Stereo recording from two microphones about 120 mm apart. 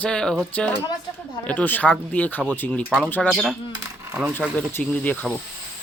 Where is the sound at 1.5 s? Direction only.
15° left (ahead or behind).